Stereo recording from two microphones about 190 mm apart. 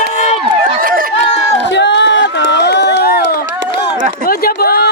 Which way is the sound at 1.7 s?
65° left (ahead or behind).